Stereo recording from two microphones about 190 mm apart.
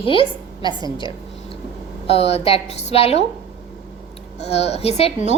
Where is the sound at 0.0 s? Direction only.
25° left (ahead or behind).